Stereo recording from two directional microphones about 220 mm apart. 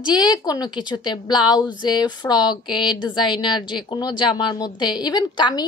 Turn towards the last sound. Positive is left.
turn(degrees=20)  # may be behind; listen again after turning